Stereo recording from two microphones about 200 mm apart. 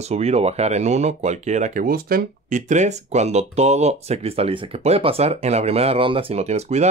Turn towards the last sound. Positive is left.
turn(degrees=-35)  # may be behind; listen again after turning